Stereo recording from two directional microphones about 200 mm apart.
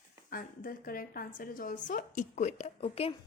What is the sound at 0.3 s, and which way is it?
A woman's voice, 45° left (ahead or behind).